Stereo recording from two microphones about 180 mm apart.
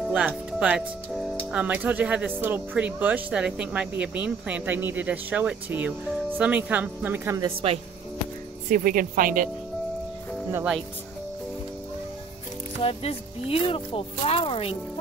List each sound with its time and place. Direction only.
0.5 s speech: 5° right (ahead or behind)
7.4 s speech: 30° right (ahead or behind)
8.6 s speech: 50° right (ahead or behind)
10.5 s speech: 5° right (ahead or behind)
12.8 s speech: 30° left (ahead or behind)